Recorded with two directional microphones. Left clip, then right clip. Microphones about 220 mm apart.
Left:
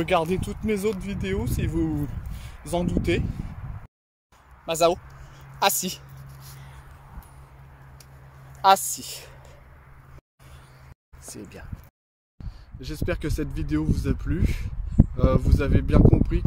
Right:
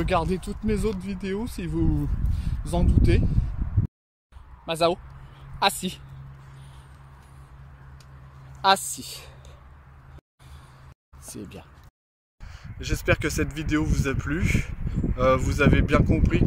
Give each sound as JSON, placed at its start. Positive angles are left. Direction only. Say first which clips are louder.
{"t": 0.0, "sound": "speech", "louder": "left 2 dB", "side_deg": -5}
{"t": 4.6, "sound": "speech", "louder": "left 2 dB", "side_deg": 0}
{"t": 8.5, "sound": "a woman's voice", "louder": "left 3 dB", "side_deg": -5}
{"t": 11.2, "sound": "speech", "louder": "right 1 dB", "side_deg": -15}
{"t": 12.4, "sound": "speech", "louder": "right 5 dB", "side_deg": 0}